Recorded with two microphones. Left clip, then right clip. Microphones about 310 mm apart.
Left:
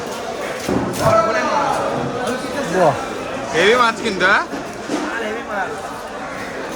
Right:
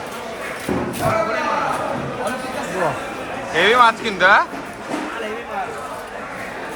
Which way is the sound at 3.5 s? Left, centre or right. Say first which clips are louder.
Right 1 dB; centre.